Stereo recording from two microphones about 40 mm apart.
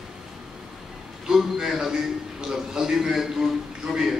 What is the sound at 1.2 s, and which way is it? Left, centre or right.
A man's voice, centre.